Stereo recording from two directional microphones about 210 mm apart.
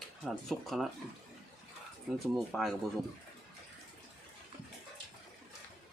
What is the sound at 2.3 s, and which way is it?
Speech, centre (ahead or behind).